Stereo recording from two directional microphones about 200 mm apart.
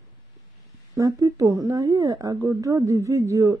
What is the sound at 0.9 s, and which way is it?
Speech, 15° right (ahead or behind).